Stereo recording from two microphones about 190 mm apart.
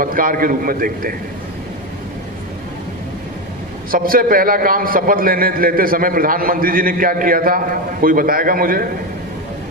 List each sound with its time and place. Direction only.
0.0 s a man's voice: 45° right (ahead or behind)
3.9 s a man's voice: 50° right (ahead or behind)